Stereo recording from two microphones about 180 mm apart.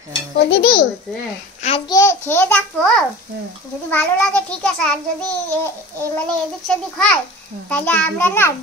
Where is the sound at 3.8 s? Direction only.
10° left (ahead or behind).